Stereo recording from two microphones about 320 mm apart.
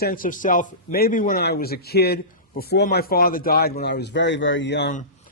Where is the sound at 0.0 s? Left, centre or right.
Left.